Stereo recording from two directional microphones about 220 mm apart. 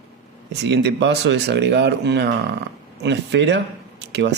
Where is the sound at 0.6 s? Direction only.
50° right (ahead or behind).